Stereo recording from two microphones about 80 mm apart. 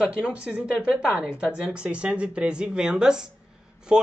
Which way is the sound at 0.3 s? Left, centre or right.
Centre.